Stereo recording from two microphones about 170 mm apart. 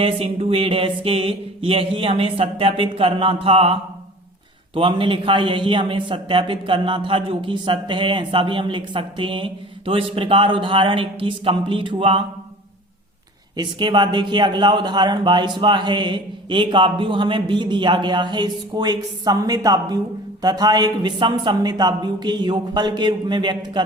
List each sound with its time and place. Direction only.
0.0 s a man's voice: 35° right (ahead or behind)
13.6 s a man's voice: 25° right (ahead or behind)